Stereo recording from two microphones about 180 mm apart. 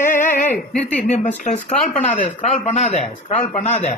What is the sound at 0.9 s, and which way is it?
Speech, 40° left (ahead or behind).